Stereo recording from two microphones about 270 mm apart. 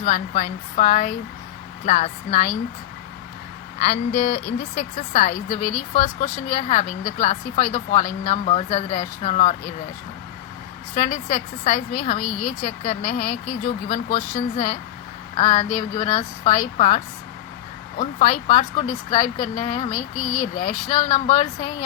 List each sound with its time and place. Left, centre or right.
0.0 s a woman's voice: left
3.8 s a woman's voice: left
10.9 s a woman's voice: left